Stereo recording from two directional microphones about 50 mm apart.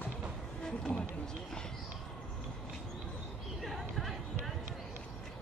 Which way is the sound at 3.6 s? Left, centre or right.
Centre.